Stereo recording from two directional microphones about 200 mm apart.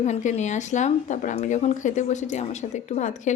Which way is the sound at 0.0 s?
35° left (ahead or behind).